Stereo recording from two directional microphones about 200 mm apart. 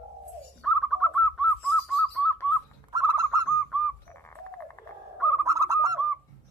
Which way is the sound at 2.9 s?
20° right (ahead or behind).